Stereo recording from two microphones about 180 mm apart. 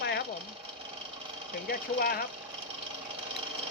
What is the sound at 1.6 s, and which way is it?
Speech, 55° left (ahead or behind).